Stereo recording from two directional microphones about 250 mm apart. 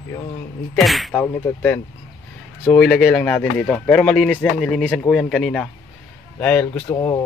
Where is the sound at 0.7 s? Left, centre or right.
Centre.